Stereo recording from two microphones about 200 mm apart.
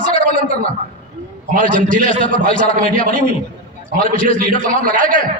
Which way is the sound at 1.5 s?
40° right (ahead or behind).